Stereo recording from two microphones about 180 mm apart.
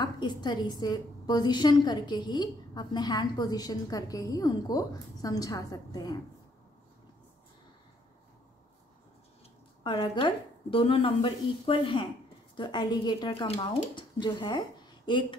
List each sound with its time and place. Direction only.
0.0 s a woman's voice: 25° left (ahead or behind)
9.8 s a woman's voice: 30° left (ahead or behind)